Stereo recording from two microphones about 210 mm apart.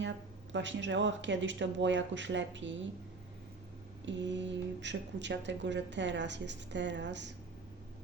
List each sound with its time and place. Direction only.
0.5 s speech: 60° right (ahead or behind)
4.0 s speech: 60° right (ahead or behind)